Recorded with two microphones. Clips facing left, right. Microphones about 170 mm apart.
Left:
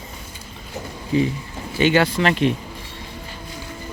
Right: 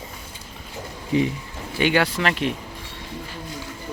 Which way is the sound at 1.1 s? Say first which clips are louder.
Left 1 dB; 20° right (ahead or behind).